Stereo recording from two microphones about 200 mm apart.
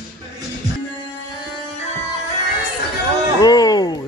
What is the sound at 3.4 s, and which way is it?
Music, 20° left (ahead or behind).